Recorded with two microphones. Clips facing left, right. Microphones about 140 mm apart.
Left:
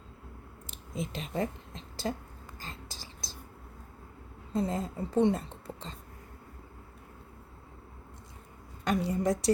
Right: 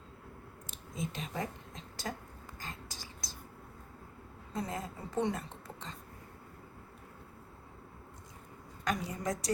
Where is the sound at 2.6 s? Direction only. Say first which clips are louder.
Left 1 dB; 30° left (ahead or behind).